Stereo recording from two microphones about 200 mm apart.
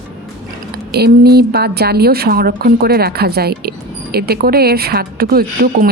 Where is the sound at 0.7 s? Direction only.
50° right (ahead or behind).